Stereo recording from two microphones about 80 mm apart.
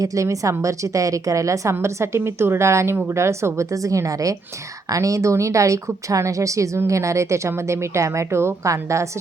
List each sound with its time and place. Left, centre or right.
0.0 s a woman's voice: right